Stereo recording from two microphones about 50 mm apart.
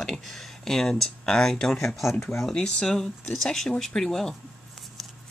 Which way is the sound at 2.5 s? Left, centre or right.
Centre.